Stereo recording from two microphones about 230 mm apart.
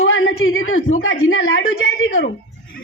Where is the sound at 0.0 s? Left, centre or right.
Left.